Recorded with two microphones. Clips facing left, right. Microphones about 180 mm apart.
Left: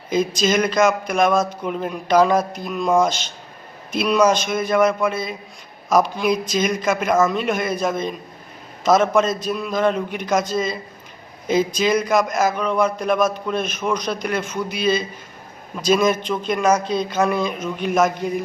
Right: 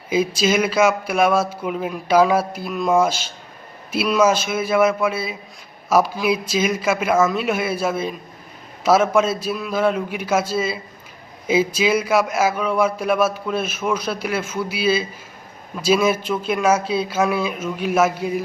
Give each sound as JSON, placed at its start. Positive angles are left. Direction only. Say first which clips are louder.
{"t": 0.1, "sound": "a man's voice", "louder": "even", "side_deg": -5}